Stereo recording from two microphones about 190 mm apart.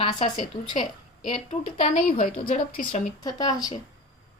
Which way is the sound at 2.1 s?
45° left (ahead or behind).